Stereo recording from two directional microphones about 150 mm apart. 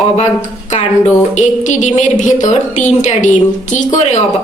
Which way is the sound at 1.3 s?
55° left (ahead or behind).